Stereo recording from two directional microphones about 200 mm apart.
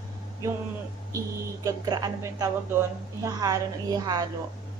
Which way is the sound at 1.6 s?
20° right (ahead or behind).